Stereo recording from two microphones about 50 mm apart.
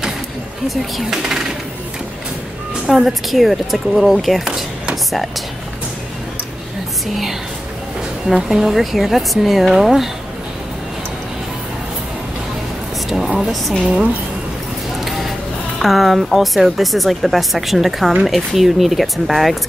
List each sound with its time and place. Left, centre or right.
2.9 s a woman's voice: centre
8.3 s a woman's voice: centre
13.1 s speech: centre
13.8 s a woman's voice: right
15.0 s a sound: centre
15.8 s a woman's voice: centre